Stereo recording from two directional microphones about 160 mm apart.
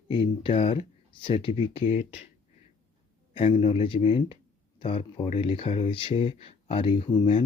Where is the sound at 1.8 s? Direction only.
50° left (ahead or behind).